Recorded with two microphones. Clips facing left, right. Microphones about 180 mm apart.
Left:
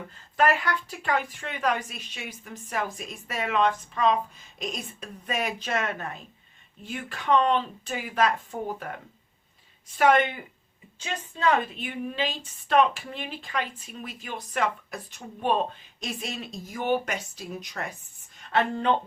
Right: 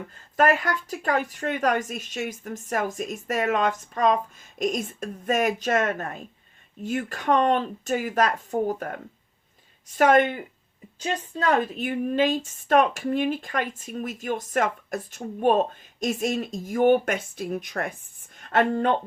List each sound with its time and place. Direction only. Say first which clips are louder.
0.3 s a woman's voice: right 2 dB; 45° right (ahead or behind)
9.9 s a woman's voice: right 3 dB; 45° right (ahead or behind)